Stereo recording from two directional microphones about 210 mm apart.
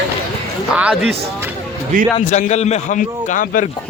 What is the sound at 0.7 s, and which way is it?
Speech, 5° right (ahead or behind).